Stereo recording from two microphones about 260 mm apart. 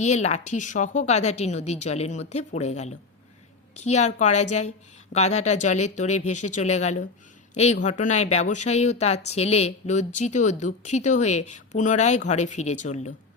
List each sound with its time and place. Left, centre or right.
0.0 s speech: left
6.1 s speech: left
6.6 s speech: left